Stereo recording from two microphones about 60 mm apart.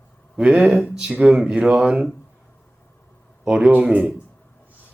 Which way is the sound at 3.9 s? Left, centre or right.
Centre.